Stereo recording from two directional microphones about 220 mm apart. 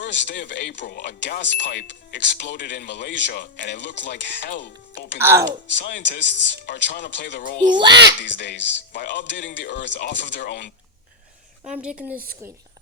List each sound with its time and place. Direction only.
0.0 s speech: 55° left (ahead or behind)
5.2 s speech: 10° right (ahead or behind)
5.6 s speech: 55° left (ahead or behind)
11.6 s speech: 5° right (ahead or behind)